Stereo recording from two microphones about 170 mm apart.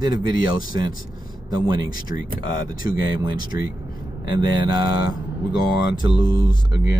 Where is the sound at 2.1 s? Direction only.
15° right (ahead or behind).